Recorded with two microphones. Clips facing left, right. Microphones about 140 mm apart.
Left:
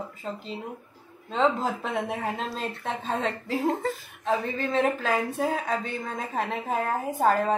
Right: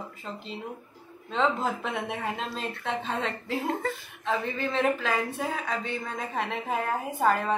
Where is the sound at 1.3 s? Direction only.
35° left (ahead or behind).